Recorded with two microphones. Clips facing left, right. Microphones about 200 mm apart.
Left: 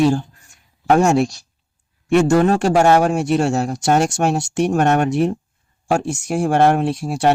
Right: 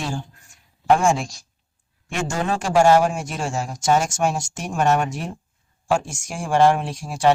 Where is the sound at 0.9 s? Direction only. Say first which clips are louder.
Left 4 dB; 65° left (ahead or behind).